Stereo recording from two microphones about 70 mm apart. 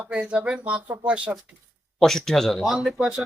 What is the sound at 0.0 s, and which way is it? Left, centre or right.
Speech, centre.